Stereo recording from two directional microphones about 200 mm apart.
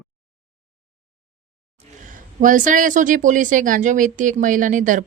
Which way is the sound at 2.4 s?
40° right (ahead or behind).